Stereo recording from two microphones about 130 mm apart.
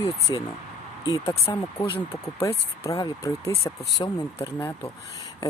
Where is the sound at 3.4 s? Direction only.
50° left (ahead or behind).